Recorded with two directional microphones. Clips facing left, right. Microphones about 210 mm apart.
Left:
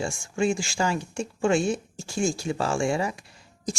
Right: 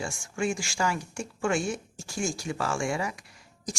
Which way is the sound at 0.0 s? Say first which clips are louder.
Left 5 dB; 25° left (ahead or behind).